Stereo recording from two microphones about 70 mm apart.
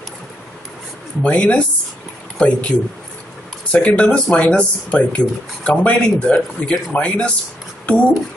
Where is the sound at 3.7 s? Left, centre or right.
Centre.